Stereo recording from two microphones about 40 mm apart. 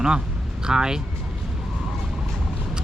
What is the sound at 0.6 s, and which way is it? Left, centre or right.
Speech, centre.